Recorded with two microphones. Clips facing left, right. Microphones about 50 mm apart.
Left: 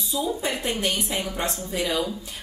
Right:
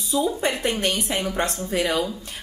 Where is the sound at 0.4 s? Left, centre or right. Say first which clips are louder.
Right 3 dB; right.